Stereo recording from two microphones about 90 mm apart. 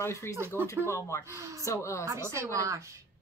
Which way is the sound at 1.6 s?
35° left (ahead or behind).